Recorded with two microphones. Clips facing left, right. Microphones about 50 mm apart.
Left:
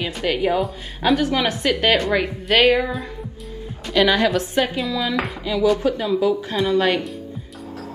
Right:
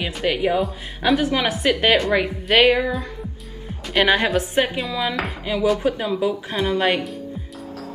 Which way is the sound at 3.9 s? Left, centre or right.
Right.